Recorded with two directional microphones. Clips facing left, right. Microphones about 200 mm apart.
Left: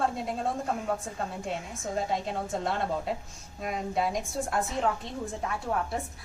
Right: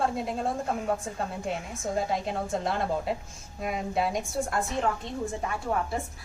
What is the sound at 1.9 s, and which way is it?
A woman's voice, 5° right (ahead or behind).